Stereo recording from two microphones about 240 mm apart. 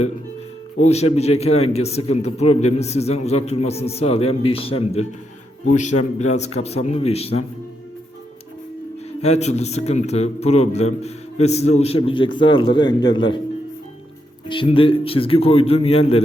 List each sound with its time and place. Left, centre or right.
0.9 s a man's voice: left
9.2 s a man's voice: left
14.4 s a man's voice: left